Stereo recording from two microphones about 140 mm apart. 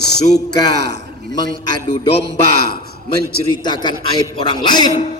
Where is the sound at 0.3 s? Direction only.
30° left (ahead or behind).